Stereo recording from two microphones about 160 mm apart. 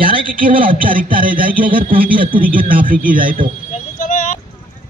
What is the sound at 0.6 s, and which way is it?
Speech, 60° right (ahead or behind).